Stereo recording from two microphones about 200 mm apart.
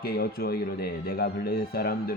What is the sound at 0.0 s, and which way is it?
Speech, 50° left (ahead or behind).